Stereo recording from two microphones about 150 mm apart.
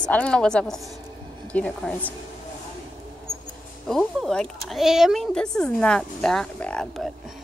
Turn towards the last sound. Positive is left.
turn(degrees=0)  # may be behind; listen again after turning